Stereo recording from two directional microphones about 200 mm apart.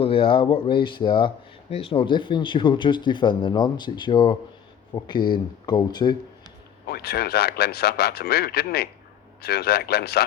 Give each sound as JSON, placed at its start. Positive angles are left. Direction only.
{"t": 0.0, "sound": "speech", "side_deg": 30}
{"t": 6.8, "sound": "speech", "side_deg": 50}